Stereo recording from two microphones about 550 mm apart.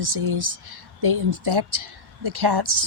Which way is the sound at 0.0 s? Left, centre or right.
Right.